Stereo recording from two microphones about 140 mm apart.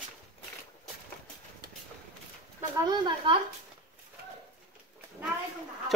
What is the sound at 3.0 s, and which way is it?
Speech, 35° right (ahead or behind).